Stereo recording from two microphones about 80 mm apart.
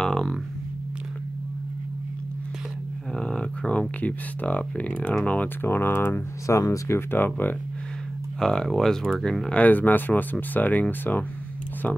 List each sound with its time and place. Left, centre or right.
0.0 s a sound: centre
3.2 s a sound: centre
4.0 s speech: centre
6.4 s speech: left
8.4 s speech: centre
9.6 s speech: left